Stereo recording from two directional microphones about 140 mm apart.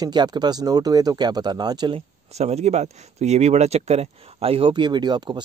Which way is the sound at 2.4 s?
50° right (ahead or behind).